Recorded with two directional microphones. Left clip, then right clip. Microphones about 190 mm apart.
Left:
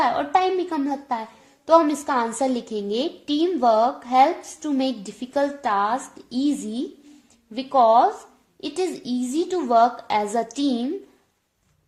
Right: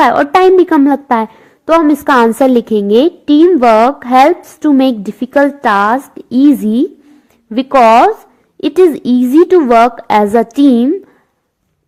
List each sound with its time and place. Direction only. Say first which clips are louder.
0.0 s a woman's voice: right 12 dB; 40° right (ahead or behind)
9.6 s a woman's voice: right 10 dB; 30° right (ahead or behind)